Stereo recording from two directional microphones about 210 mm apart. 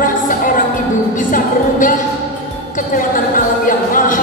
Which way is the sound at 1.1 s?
40° left (ahead or behind).